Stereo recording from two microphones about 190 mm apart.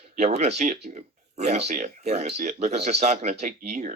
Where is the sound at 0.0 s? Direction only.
35° right (ahead or behind).